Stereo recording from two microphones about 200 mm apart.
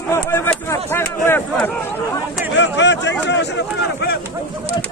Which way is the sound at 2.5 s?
65° left (ahead or behind).